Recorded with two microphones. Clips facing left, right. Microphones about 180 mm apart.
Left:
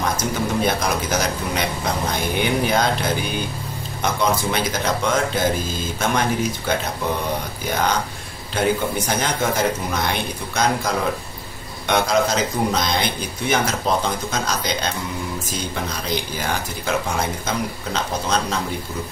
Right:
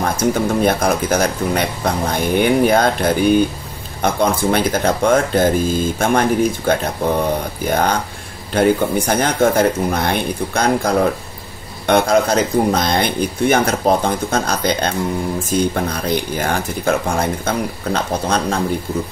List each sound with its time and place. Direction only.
0.0 s speech: 50° right (ahead or behind)